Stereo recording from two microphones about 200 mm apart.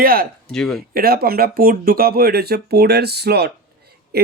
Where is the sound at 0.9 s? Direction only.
50° right (ahead or behind).